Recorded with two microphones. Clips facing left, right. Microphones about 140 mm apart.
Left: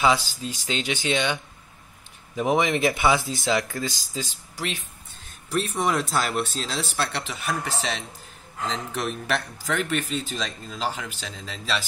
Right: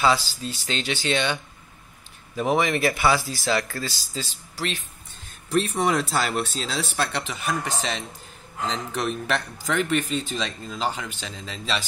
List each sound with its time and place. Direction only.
0.0 s speech: 15° left (ahead or behind)
5.5 s speech: centre (ahead or behind)